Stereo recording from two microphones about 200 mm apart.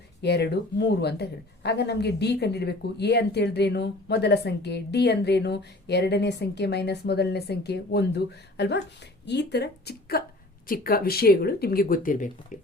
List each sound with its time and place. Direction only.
0.2 s speech: 55° left (ahead or behind); by 12.5 s 40° left (ahead or behind)